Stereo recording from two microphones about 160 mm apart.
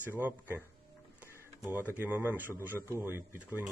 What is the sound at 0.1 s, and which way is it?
Speech, 10° right (ahead or behind).